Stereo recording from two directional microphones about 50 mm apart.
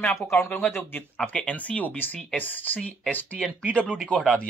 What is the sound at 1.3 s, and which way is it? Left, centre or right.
Speech, left.